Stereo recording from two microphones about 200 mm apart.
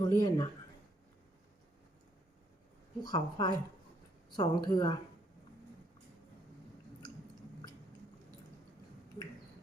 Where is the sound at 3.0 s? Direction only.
20° left (ahead or behind).